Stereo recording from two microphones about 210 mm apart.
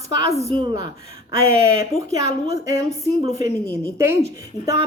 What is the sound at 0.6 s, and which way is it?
Speech, 20° right (ahead or behind).